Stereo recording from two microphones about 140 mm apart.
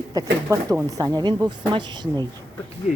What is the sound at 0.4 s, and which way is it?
Speech, 20° right (ahead or behind).